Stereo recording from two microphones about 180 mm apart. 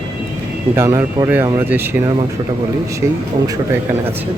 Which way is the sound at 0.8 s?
15° right (ahead or behind).